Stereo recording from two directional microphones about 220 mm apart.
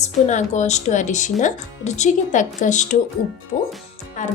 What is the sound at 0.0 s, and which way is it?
A woman's voice, 30° left (ahead or behind).